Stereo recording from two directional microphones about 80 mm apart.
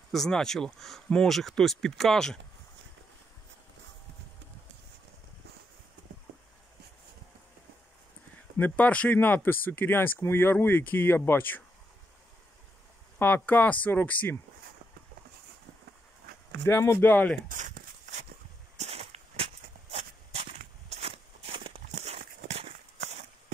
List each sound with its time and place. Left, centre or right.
0.1 s speech: centre
8.5 s speech: left
13.2 s speech: left
16.6 s speech: left